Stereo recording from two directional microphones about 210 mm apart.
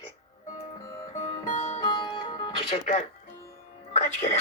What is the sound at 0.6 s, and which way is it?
Music, 20° left (ahead or behind).